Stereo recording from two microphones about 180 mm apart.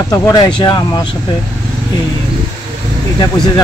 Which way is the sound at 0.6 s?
25° left (ahead or behind).